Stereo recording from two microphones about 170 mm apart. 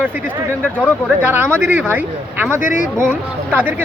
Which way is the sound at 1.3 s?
10° right (ahead or behind).